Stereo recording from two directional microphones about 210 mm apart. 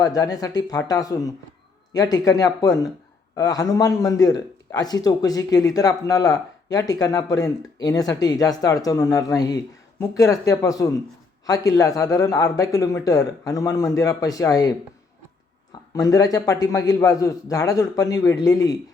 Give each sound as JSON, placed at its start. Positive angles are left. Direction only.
{"t": 0.0, "sound": "a man's voice", "side_deg": 15}
{"t": 16.0, "sound": "a man's voice", "side_deg": 15}